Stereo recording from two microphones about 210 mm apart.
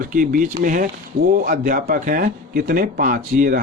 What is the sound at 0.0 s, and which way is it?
Speech, 40° right (ahead or behind).